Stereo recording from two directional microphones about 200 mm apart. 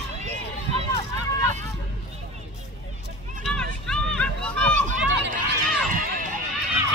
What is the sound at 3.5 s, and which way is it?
Run, 5° left (ahead or behind).